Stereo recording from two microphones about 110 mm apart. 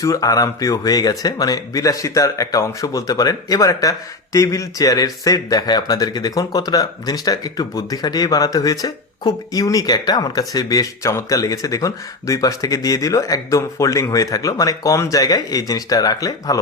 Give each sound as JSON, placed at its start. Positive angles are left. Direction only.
{"t": 0.0, "sound": "speech", "side_deg": 30}